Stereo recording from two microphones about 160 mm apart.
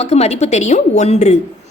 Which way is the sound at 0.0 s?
40° left (ahead or behind).